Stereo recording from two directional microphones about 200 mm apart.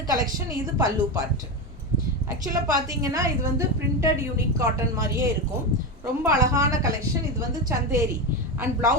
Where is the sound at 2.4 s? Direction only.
20° right (ahead or behind).